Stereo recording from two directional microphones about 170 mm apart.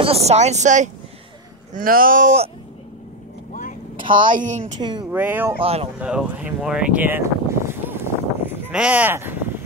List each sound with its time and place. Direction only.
0.0 s speech: 35° right (ahead or behind)
1.7 s speech: 55° right (ahead or behind)
4.0 s a sound: 30° right (ahead or behind)
4.3 s speech: 50° right (ahead or behind)
5.1 s speech: 10° right (ahead or behind)
5.6 s speech: 35° right (ahead or behind)
5.9 s speech: 5° right (ahead or behind)